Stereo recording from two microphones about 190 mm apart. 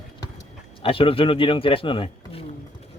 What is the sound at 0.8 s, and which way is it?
A man's voice, 30° left (ahead or behind).